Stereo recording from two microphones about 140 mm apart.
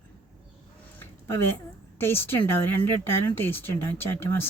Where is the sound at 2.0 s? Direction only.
15° left (ahead or behind).